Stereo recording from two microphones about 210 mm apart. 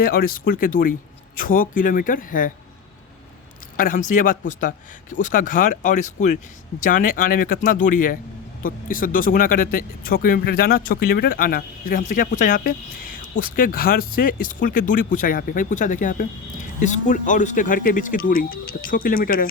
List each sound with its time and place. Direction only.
0.0 s speech: 45° left (ahead or behind)
3.8 s speech: 40° left (ahead or behind)